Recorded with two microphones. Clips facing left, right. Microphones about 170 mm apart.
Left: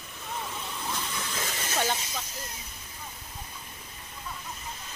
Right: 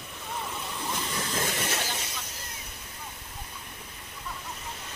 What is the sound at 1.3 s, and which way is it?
Hiss, 55° right (ahead or behind).